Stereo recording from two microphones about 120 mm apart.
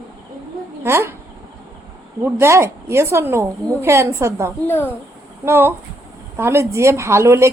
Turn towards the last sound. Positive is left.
turn(degrees=-20)  # may be behind; listen again after turning